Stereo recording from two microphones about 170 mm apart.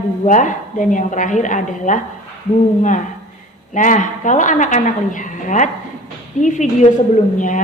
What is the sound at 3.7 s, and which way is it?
A woman's voice, 50° left (ahead or behind).